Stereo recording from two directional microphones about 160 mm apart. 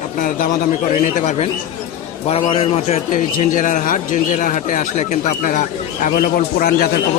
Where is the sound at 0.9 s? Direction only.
45° left (ahead or behind).